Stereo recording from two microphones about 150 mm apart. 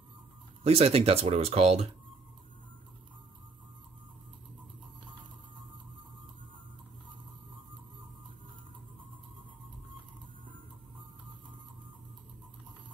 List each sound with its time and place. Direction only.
0.7 s speech: 40° right (ahead or behind)